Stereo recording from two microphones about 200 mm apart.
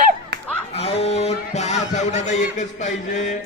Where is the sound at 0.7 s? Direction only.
30° left (ahead or behind).